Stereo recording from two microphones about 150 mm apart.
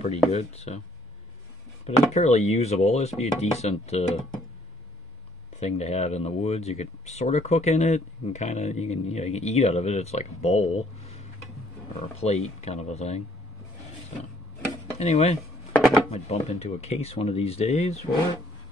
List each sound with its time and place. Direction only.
0.3 s speech: 45° left (ahead or behind)
1.9 s speech: 45° left (ahead or behind)
5.6 s speech: 45° left (ahead or behind)
15.0 s speech: 45° left (ahead or behind)
15.7 s chopping: centre (ahead or behind)
16.1 s speech: 45° left (ahead or behind)